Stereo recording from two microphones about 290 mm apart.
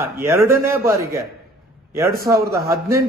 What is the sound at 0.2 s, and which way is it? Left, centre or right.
A man's voice, centre.